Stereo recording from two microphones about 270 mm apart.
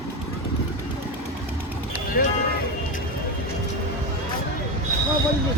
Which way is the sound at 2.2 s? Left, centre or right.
Left.